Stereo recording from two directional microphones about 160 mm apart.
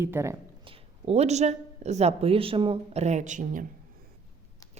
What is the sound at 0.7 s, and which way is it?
A woman's voice, 40° right (ahead or behind).